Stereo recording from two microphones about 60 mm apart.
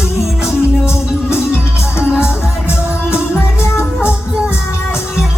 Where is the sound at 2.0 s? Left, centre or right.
Centre.